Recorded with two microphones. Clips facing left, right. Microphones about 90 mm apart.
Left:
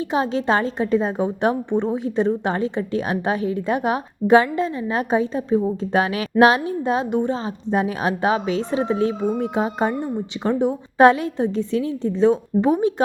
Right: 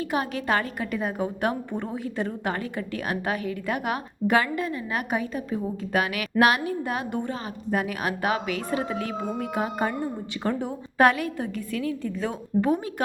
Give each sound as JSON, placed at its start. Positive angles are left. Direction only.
{"t": 0.0, "sound": "a woman's voice", "side_deg": 25}